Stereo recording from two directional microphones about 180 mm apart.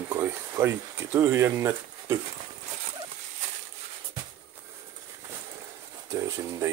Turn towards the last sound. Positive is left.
turn(degrees=-15)  # may be behind; listen again after turning